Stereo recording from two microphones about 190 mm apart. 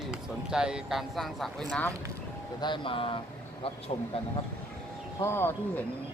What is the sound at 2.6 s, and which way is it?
Speech, 25° left (ahead or behind).